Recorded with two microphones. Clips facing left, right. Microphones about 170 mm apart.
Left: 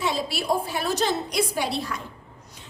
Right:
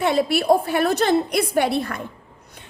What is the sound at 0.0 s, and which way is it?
A woman's voice, 60° right (ahead or behind).